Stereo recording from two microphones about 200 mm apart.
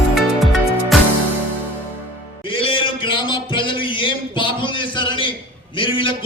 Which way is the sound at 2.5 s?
25° left (ahead or behind).